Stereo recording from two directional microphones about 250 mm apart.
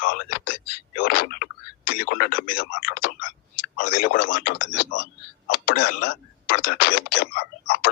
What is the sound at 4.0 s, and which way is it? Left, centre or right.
Speech, left.